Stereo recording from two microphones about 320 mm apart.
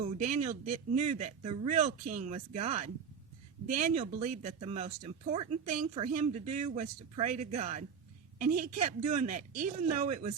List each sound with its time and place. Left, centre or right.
0.0 s a woman's voice: right